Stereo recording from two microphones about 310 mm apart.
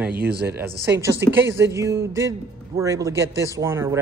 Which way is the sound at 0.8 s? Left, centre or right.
Centre.